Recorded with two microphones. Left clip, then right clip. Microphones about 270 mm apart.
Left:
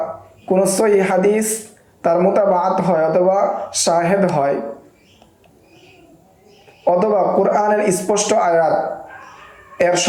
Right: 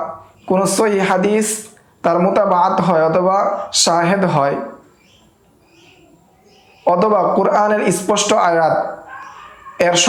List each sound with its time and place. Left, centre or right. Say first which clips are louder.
0.4 s speech: even; right
6.8 s speech: right 1 dB; right
9.7 s speech: right 2 dB; right